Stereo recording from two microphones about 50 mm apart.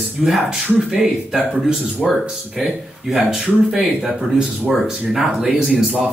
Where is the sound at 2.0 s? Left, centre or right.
Centre.